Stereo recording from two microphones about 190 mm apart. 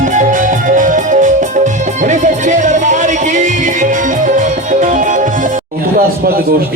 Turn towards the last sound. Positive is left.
turn(degrees=-45)  # may be behind; listen again after turning